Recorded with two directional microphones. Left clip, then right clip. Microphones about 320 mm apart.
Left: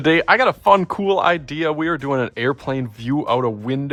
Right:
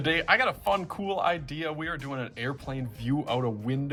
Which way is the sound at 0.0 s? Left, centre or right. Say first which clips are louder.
Left 9 dB; centre.